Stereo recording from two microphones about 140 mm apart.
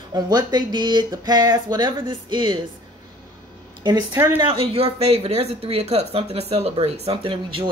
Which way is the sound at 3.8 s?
30° right (ahead or behind).